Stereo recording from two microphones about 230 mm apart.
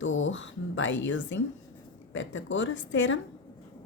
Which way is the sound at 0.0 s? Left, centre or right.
Left.